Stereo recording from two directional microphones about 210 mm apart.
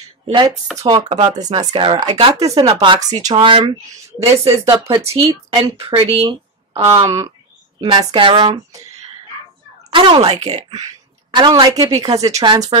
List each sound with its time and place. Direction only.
0.3 s a woman's voice: 20° right (ahead or behind)
1.0 s speech: 30° right (ahead or behind)
1.4 s a woman's voice: 20° right (ahead or behind)
7.1 s a woman's voice: 15° right (ahead or behind); by 10.6 s 30° right (ahead or behind)
11.3 s a woman's voice: 20° right (ahead or behind)